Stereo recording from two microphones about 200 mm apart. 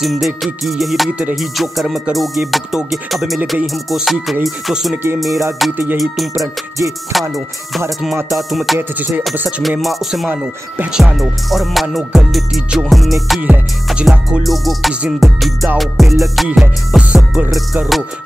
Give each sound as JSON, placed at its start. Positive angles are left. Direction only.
{"t": 0.0, "sound": "speech", "side_deg": 0}
{"t": 6.3, "sound": "music", "side_deg": -15}
{"t": 7.1, "sound": "speech", "side_deg": 0}
{"t": 8.7, "sound": "music", "side_deg": -10}
{"t": 9.2, "sound": "speech", "side_deg": -5}